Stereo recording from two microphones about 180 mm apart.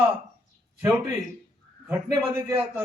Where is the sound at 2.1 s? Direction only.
15° right (ahead or behind).